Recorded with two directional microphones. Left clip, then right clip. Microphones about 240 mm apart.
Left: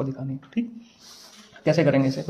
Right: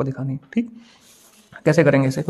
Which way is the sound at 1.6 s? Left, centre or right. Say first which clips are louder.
Right 4 dB; right.